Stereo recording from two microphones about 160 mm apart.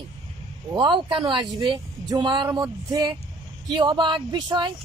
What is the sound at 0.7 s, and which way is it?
Speech, 30° right (ahead or behind).